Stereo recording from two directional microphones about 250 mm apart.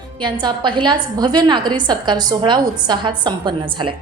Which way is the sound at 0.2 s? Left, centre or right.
Centre.